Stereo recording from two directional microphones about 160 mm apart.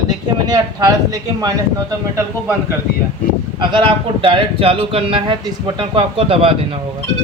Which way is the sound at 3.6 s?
30° right (ahead or behind).